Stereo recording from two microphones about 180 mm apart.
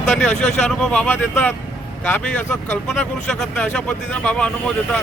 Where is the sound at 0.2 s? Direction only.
5° left (ahead or behind).